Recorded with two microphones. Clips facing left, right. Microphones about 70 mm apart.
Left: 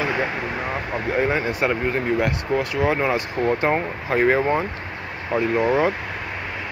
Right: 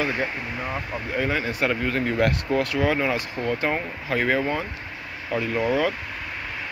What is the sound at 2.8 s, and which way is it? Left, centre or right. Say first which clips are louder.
Speech: left 2 dB; left.